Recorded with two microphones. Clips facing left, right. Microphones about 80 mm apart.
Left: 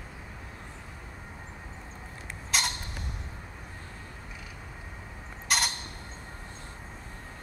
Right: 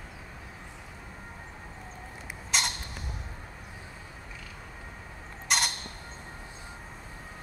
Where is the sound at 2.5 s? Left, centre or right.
Centre.